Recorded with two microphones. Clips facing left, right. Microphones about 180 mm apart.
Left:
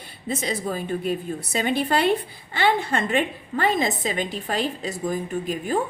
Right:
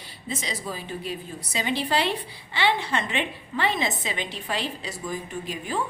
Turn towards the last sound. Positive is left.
turn(degrees=45)  # may be behind; listen again after turning